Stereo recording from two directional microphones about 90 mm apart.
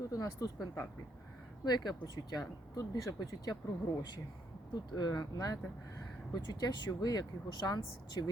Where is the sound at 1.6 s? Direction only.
50° left (ahead or behind).